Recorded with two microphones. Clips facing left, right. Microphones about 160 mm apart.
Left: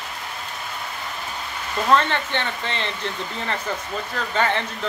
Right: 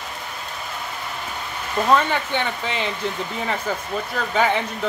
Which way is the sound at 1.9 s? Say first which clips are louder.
Even; 10° right (ahead or behind).